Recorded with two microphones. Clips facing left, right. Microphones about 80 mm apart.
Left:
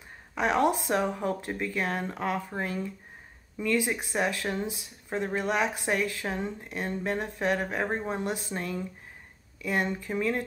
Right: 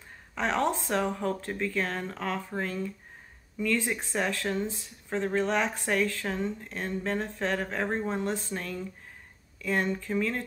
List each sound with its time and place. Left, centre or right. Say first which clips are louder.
0.3 s speech: left 3 dB; centre